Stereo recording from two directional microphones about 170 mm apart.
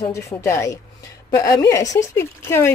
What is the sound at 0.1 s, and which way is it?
Speech, 15° left (ahead or behind).